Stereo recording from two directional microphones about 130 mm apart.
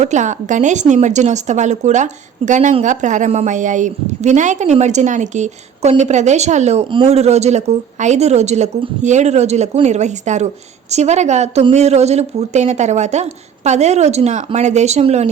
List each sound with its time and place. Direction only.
0.0 s a woman's voice: 65° right (ahead or behind)